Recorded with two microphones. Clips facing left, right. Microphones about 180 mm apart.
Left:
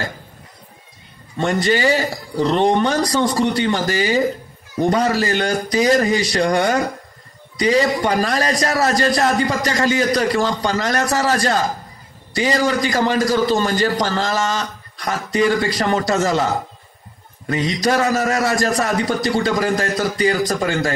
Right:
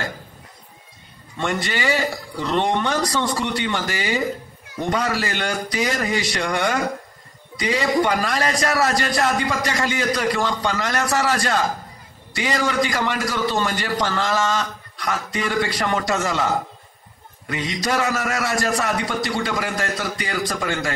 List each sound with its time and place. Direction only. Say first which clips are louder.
1.4 s a man's voice: left 6 dB; 40° left (ahead or behind)
17.5 s a man's voice: left 6 dB; 40° left (ahead or behind)